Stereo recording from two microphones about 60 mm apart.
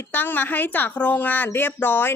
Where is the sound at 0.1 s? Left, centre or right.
Left.